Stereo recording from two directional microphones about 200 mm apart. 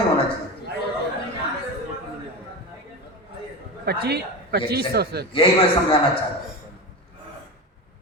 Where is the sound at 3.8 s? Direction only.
55° right (ahead or behind).